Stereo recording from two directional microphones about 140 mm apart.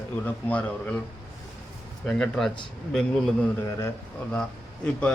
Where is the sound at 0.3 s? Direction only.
10° left (ahead or behind).